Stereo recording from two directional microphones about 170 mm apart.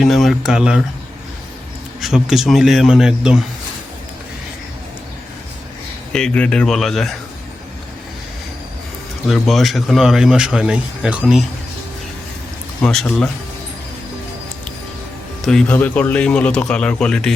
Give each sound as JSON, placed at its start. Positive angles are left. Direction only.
{"t": 0.0, "sound": "speech", "side_deg": 0}
{"t": 2.0, "sound": "speech", "side_deg": 0}
{"t": 6.1, "sound": "speech", "side_deg": 5}
{"t": 9.2, "sound": "speech", "side_deg": 0}
{"t": 12.8, "sound": "speech", "side_deg": 5}
{"t": 15.4, "sound": "speech", "side_deg": 5}